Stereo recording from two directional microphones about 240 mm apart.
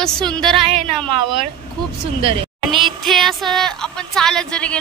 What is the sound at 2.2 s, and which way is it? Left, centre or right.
Speech, right.